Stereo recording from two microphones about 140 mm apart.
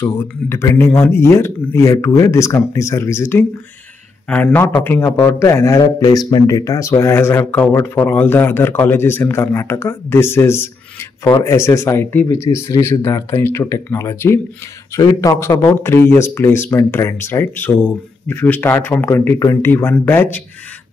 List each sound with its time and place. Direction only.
0.0 s speech: 15° left (ahead or behind)